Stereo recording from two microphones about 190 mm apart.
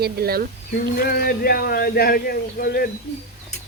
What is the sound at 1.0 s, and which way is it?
Speech, 50° left (ahead or behind).